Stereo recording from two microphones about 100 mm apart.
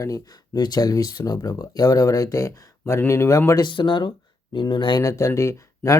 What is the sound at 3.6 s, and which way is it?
Speech, 55° left (ahead or behind).